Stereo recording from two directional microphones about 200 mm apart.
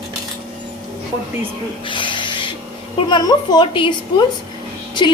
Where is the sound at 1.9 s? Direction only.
25° left (ahead or behind).